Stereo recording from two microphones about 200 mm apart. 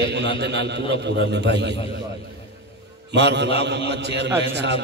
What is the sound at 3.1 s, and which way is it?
Speech, 60° right (ahead or behind).